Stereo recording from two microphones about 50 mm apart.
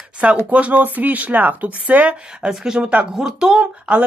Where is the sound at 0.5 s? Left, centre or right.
Right.